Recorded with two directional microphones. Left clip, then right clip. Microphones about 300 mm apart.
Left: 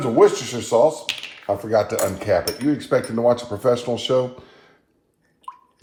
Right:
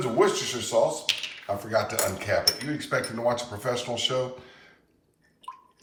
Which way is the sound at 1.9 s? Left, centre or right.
Centre.